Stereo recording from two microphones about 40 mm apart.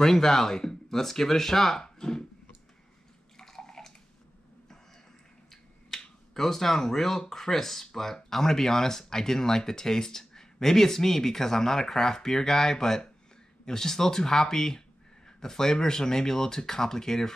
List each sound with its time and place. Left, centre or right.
0.0 s speech: centre
1.8 s a sound: centre
3.3 s water: centre
5.5 s speech: centre